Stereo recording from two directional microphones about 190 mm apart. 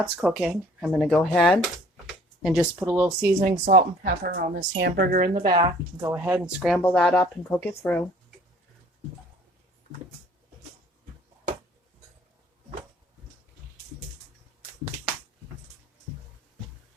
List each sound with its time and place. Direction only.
0.2 s speech: 5° right (ahead or behind)
3.7 s a woman's voice: 45° right (ahead or behind)
5.3 s speech: 20° right (ahead or behind); by 8.0 s 10° left (ahead or behind)